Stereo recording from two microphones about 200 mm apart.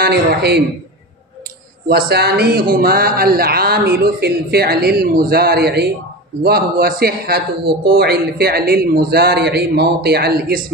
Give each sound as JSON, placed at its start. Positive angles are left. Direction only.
{"t": 0.0, "sound": "a man's voice", "side_deg": -55}
{"t": 1.9, "sound": "a man's voice", "side_deg": -50}